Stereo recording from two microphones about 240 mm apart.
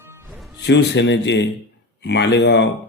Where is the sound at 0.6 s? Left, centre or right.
Left.